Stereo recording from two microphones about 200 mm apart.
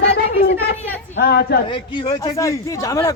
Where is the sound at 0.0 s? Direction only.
60° left (ahead or behind).